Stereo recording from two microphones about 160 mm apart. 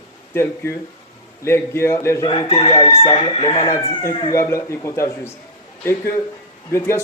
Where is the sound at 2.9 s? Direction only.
35° left (ahead or behind); by 5.3 s 15° left (ahead or behind).